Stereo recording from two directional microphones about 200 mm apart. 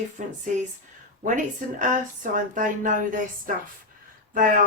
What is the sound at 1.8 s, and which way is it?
Speech, 40° right (ahead or behind).